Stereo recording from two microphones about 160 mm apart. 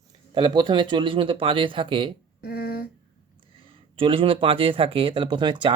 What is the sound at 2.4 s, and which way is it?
Speech, 75° left (ahead or behind).